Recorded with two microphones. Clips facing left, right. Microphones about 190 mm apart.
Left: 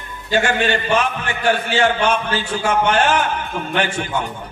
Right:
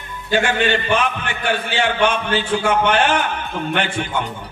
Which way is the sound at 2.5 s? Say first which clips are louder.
Even; 60° right (ahead or behind).